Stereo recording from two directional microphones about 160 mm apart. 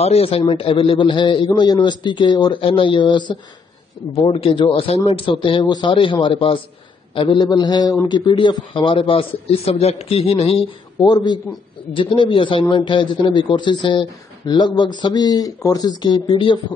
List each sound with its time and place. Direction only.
0.0 s a man's voice: 40° left (ahead or behind)